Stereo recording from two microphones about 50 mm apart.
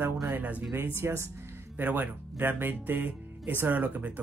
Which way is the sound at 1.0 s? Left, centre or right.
Right.